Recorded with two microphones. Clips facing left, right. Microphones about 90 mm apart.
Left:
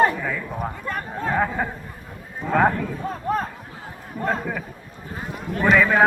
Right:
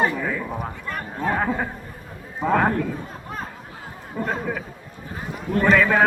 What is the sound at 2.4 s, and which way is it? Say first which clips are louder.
Speech: right 3 dB; 90° right.